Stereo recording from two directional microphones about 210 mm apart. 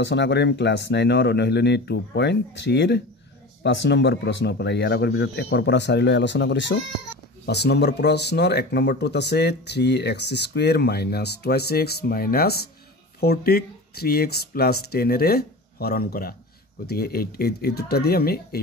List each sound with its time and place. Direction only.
0.0 s speech: 55° left (ahead or behind)